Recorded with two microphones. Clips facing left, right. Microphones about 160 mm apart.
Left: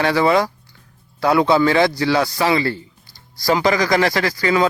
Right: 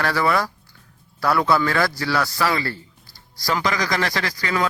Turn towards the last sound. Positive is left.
turn(degrees=30)  # may be behind; listen again after turning